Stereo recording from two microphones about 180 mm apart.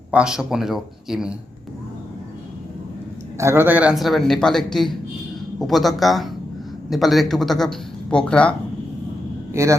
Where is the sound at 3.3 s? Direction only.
15° right (ahead or behind); by 8.5 s 5° left (ahead or behind).